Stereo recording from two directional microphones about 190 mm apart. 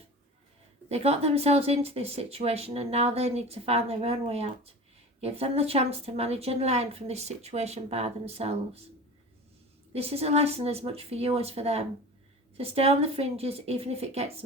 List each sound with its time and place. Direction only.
0.9 s speech: 35° right (ahead or behind)
9.9 s speech: 30° right (ahead or behind)